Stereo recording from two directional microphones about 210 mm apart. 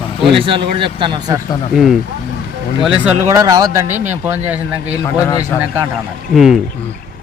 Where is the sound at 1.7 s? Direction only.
5° right (ahead or behind).